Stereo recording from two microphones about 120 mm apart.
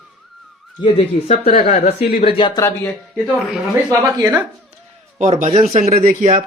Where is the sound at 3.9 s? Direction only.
25° right (ahead or behind).